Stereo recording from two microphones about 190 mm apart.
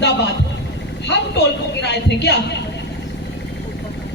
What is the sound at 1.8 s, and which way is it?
Speech, 65° left (ahead or behind).